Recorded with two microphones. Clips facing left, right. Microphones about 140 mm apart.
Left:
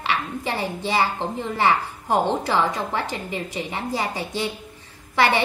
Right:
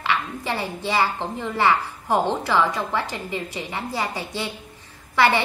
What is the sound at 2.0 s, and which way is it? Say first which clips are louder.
A woman's voice: left 1 dB; 20° left (ahead or behind).